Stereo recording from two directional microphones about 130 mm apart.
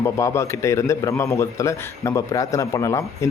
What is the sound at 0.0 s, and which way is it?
A man's voice, 25° left (ahead or behind).